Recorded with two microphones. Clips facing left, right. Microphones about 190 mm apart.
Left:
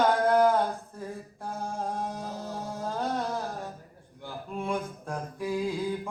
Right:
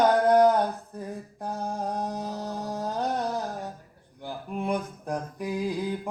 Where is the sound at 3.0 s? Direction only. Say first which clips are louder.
Right 2 dB; 20° right (ahead or behind).